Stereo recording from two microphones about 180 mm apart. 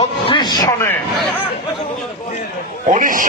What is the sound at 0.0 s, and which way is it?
Speech, 25° left (ahead or behind).